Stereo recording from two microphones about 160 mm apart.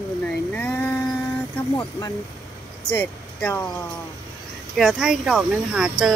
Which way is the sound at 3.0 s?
10° left (ahead or behind).